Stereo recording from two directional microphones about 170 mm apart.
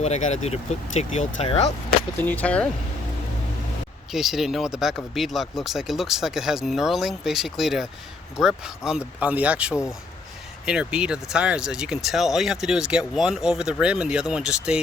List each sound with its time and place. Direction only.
0.0 s speech: 40° left (ahead or behind)
2.2 s speech: 10° left (ahead or behind)
4.1 s speech: centre (ahead or behind)